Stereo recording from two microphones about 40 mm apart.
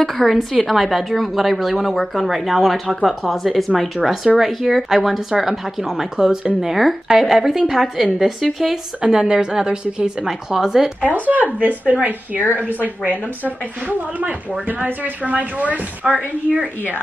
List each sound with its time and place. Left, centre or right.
0.0 s a woman's voice: centre
11.0 s a woman's voice: right
14.8 s speech: right
16.0 s a woman's voice: centre